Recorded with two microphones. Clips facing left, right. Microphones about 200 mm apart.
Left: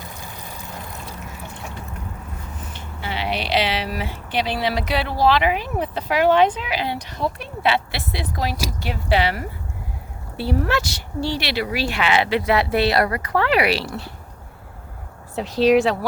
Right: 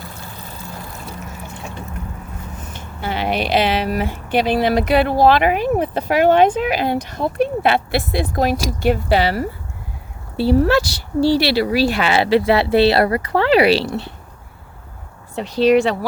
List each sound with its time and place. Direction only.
0.1 s vehicle: 15° left (ahead or behind)
2.7 s speech: 45° right (ahead or behind); by 14.1 s 25° right (ahead or behind)
15.4 s speech: centre (ahead or behind)